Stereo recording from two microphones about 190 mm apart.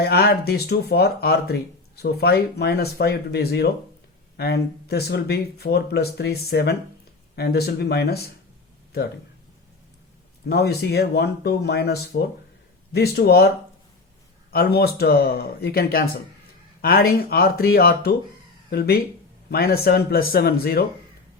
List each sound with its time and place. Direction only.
0.0 s speech: 55° left (ahead or behind)
10.4 s speech: 60° left (ahead or behind)
14.5 s speech: 55° left (ahead or behind)